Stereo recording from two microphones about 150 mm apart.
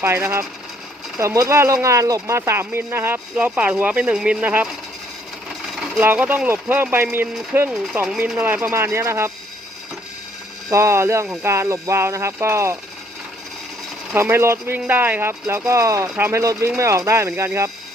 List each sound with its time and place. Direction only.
0.0 s speech: 15° right (ahead or behind)
5.7 s sewing machine: centre (ahead or behind)
6.0 s speech: 15° right (ahead or behind)
8.0 s speech: 5° right (ahead or behind)
8.4 s speech: 15° right (ahead or behind)
10.7 s speech: 20° right (ahead or behind)
14.1 s speech: 15° right (ahead or behind)